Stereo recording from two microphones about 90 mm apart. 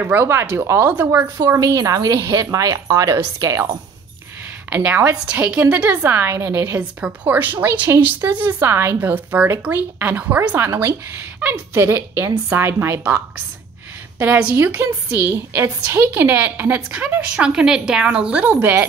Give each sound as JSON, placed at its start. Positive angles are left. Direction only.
{"t": 0.0, "sound": "a woman's voice", "side_deg": -25}
{"t": 1.5, "sound": "a woman's voice", "side_deg": -40}
{"t": 4.6, "sound": "a woman's voice", "side_deg": -20}
{"t": 6.8, "sound": "a woman's voice", "side_deg": -15}
{"t": 11.7, "sound": "a woman's voice", "side_deg": -30}